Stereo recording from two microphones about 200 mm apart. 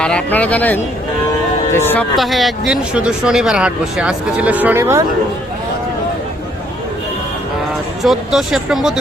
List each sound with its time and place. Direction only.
0.0 s a man's voice: 5° left (ahead or behind)
2.1 s speech: centre (ahead or behind)
8.0 s speech: centre (ahead or behind)